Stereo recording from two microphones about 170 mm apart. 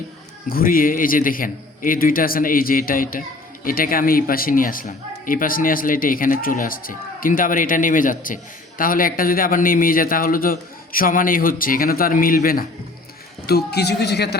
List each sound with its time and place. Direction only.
0.5 s a man's voice: 55° left (ahead or behind)
13.5 s speech: 70° left (ahead or behind)